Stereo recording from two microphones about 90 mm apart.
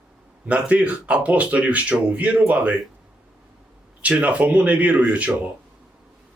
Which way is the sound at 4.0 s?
15° right (ahead or behind).